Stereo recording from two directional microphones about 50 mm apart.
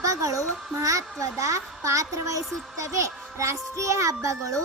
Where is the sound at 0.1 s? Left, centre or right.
Right.